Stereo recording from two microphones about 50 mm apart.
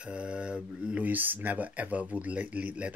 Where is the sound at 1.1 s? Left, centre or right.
Right.